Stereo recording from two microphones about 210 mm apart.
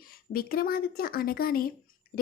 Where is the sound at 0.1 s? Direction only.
45° left (ahead or behind).